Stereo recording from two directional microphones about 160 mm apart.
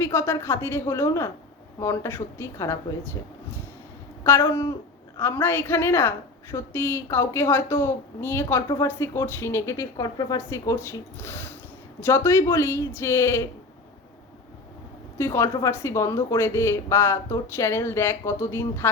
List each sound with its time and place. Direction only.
0.0 s a woman's voice: 15° left (ahead or behind)
4.2 s a woman's voice: 15° left (ahead or behind)
15.2 s a woman's voice: 15° left (ahead or behind)